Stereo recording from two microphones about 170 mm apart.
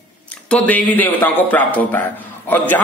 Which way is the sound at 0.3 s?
10° left (ahead or behind).